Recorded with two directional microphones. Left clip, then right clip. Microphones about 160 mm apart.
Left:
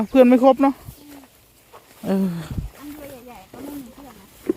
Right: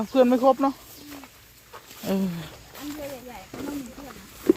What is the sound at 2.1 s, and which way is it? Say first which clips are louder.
Speech: left 4 dB; 40° left (ahead or behind).